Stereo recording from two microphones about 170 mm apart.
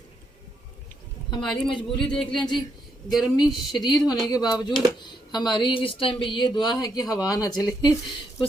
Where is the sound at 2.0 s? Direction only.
5° left (ahead or behind).